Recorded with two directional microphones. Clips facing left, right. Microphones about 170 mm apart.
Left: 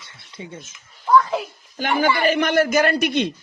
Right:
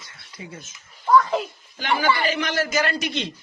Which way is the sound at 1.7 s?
50° left (ahead or behind).